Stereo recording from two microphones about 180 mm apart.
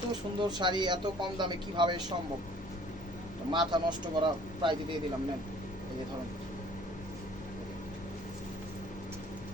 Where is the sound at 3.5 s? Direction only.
25° right (ahead or behind).